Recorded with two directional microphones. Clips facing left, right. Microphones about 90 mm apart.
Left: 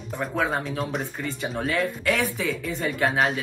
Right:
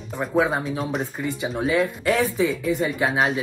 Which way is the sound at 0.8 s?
5° right (ahead or behind).